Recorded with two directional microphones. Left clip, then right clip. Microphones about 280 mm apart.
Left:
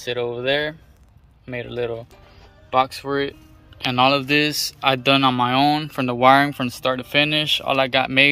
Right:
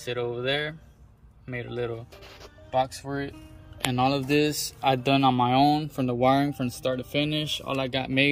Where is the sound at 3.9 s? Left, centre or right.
Centre.